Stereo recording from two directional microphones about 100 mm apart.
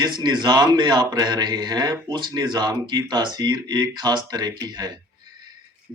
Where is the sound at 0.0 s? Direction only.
45° right (ahead or behind).